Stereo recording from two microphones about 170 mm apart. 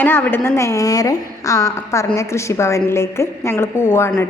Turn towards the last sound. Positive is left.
turn(degrees=15)  # may be behind; listen again after turning